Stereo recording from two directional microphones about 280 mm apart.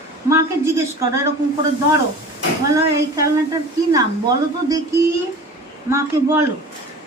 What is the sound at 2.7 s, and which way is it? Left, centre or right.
A woman's voice, centre.